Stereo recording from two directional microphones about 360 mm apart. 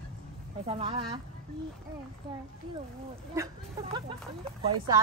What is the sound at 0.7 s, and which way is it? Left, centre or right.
Speech, centre.